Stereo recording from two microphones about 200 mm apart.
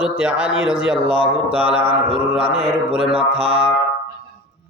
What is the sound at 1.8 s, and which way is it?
Mantra, 30° right (ahead or behind).